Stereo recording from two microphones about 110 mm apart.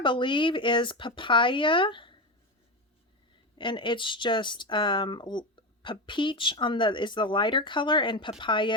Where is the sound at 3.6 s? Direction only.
45° left (ahead or behind).